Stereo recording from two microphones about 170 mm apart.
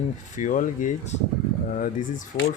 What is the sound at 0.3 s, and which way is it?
Speech, 50° left (ahead or behind).